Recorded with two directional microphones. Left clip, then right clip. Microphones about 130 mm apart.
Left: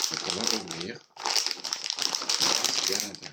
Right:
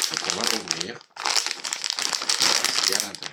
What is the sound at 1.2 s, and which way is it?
Crumpling, 40° right (ahead or behind).